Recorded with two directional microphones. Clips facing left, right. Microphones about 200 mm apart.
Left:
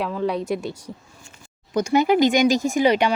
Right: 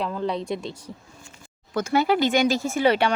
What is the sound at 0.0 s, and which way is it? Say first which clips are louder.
Speech: left 3 dB; 5° left (ahead or behind).